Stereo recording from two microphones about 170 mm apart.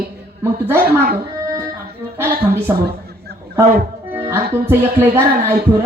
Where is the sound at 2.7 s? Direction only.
15° right (ahead or behind).